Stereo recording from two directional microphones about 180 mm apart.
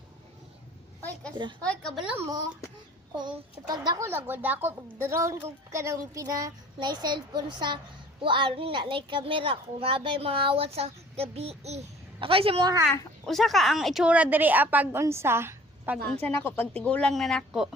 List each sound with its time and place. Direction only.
1.6 s a woman's voice: 5° left (ahead or behind)
2.0 s a child's voice: 15° right (ahead or behind)
13.2 s a child's voice: centre (ahead or behind)
16.2 s a woman's voice: 10° left (ahead or behind)